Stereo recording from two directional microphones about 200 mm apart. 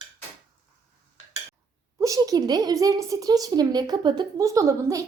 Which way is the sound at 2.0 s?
15° right (ahead or behind).